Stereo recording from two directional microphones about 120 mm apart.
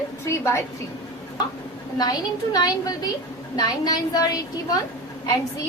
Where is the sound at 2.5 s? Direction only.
30° left (ahead or behind).